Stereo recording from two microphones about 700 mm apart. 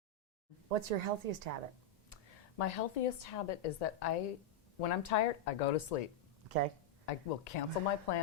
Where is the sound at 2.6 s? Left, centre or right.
Left.